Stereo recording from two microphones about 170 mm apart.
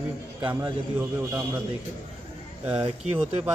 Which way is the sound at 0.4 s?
25° right (ahead or behind).